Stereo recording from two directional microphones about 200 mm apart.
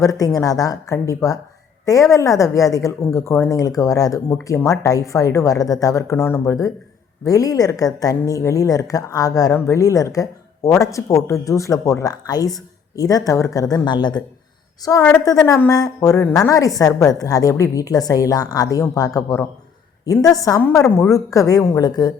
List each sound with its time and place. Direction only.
0.0 s a woman's voice: 15° left (ahead or behind)
20.8 s a woman's voice: centre (ahead or behind)
21.1 s a woman's voice: 15° left (ahead or behind)